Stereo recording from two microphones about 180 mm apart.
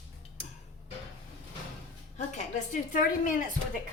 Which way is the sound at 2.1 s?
40° left (ahead or behind).